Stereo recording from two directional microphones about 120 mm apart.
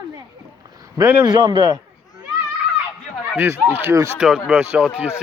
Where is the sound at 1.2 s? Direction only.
40° right (ahead or behind).